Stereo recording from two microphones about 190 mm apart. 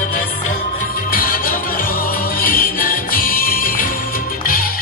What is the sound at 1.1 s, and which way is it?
Music, 50° left (ahead or behind).